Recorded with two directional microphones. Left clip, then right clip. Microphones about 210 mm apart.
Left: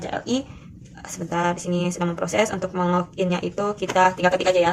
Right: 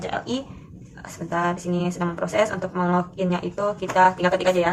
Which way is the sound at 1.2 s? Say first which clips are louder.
Left 1 dB; 35° left (ahead or behind).